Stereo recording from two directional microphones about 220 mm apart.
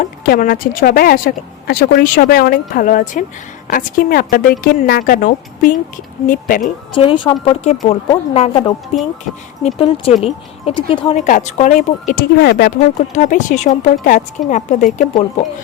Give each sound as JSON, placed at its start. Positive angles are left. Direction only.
{"t": 0.0, "sound": "a woman's voice", "side_deg": 35}
{"t": 6.9, "sound": "speech", "side_deg": 25}
{"t": 11.2, "sound": "a woman's voice", "side_deg": 35}
{"t": 13.1, "sound": "a woman's voice", "side_deg": 35}